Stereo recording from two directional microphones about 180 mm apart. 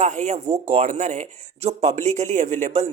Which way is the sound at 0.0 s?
40° right (ahead or behind).